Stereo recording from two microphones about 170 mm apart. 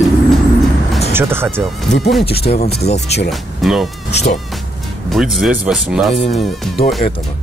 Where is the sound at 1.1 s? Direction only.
15° right (ahead or behind).